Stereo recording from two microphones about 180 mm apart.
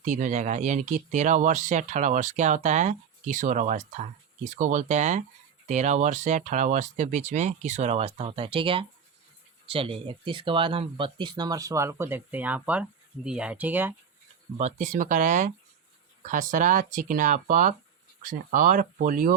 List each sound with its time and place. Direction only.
0.0 s speech: 45° right (ahead or behind); by 13.9 s 10° right (ahead or behind)
14.6 s speech: 45° right (ahead or behind)